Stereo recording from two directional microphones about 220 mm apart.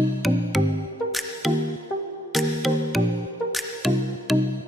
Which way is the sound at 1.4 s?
Centre (ahead or behind).